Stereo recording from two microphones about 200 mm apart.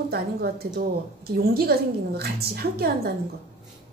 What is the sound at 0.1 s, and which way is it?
A woman's voice, 50° right (ahead or behind).